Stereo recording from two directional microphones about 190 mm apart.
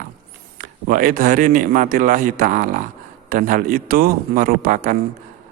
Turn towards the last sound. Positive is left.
turn(degrees=-45)  # may be behind; listen again after turning